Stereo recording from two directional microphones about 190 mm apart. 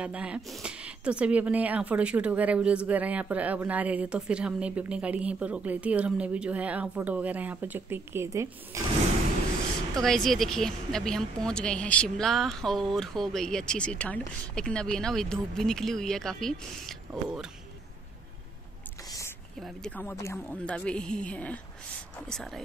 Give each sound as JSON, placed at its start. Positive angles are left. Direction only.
{"t": 0.0, "sound": "speech", "side_deg": -5}
{"t": 10.0, "sound": "a woman's voice", "side_deg": 0}
{"t": 19.0, "sound": "a sound", "side_deg": 15}
{"t": 19.6, "sound": "a woman's voice", "side_deg": 5}